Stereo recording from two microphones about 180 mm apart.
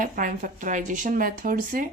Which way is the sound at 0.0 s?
50° right (ahead or behind).